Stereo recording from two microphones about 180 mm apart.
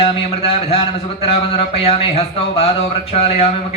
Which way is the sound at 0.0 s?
35° left (ahead or behind).